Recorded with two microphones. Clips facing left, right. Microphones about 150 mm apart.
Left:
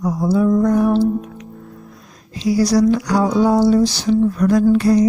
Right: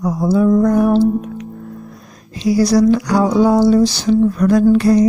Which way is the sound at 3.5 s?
85° right.